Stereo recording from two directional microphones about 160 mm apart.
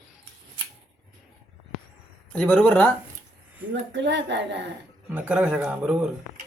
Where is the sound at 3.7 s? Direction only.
90° right.